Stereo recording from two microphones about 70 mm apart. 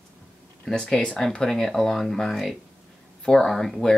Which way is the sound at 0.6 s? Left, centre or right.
Centre.